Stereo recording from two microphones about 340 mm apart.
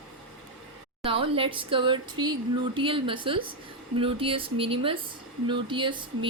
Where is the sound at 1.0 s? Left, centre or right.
Centre.